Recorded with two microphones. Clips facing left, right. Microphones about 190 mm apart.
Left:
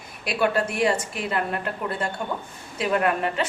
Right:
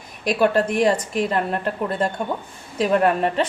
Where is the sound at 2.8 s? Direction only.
35° right (ahead or behind).